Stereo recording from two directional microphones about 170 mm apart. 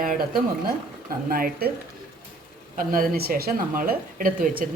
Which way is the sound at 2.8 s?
55° right (ahead or behind).